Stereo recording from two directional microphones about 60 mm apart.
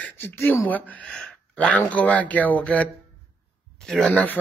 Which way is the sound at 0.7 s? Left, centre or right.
Left.